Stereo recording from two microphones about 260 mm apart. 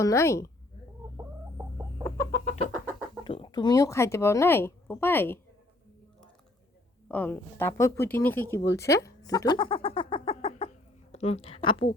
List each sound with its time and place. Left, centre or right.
0.0 s speech: centre
2.8 s speech: centre
7.1 s a woman's voice: centre